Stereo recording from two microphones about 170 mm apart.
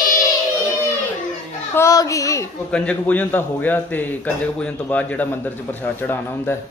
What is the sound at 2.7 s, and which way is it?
A man's voice, 5° left (ahead or behind).